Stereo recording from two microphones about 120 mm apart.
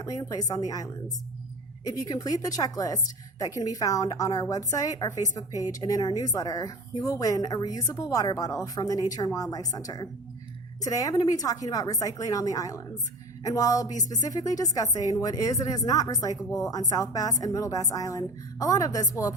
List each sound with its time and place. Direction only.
0.0 s a woman's voice: 30° left (ahead or behind)